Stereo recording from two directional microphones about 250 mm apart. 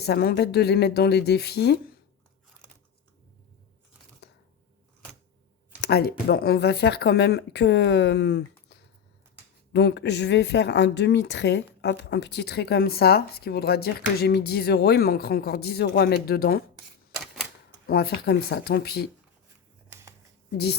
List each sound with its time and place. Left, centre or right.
0.0 s speech: left
4.2 s a sound: left
5.8 s speech: left
16.7 s typewriter: centre
17.8 s speech: left
19.9 s a sound: centre